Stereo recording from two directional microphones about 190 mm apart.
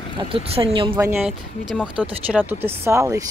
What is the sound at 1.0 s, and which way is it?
Speech, 15° right (ahead or behind).